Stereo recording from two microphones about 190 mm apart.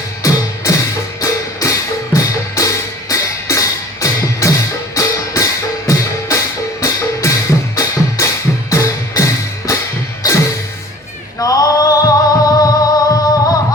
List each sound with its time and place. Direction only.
0.2 s music: 15° left (ahead or behind)
11.3 s music: 20° left (ahead or behind)